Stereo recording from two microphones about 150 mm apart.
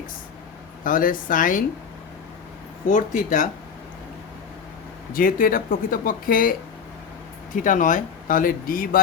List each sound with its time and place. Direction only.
0.9 s speech: 65° left (ahead or behind)
2.9 s speech: 60° left (ahead or behind)
5.1 s speech: 70° left (ahead or behind)
7.5 s speech: 60° left (ahead or behind)